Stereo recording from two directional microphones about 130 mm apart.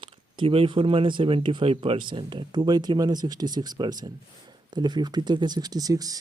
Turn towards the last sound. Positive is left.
turn(degrees=-30)  # may be behind; listen again after turning